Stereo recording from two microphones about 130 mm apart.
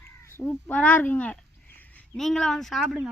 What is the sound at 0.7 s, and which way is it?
Speech, 10° left (ahead or behind).